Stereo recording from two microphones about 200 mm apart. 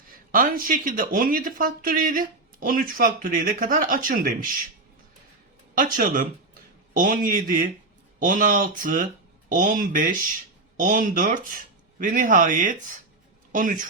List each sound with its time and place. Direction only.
0.3 s speech: 45° right (ahead or behind)
5.7 s speech: 45° right (ahead or behind)